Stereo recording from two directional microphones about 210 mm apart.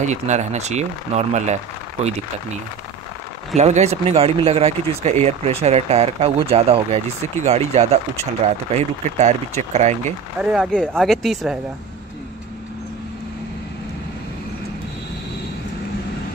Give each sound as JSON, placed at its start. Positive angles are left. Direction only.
{"t": 0.0, "sound": "speech", "side_deg": -35}
{"t": 3.5, "sound": "speech", "side_deg": -30}
{"t": 10.4, "sound": "speech", "side_deg": 0}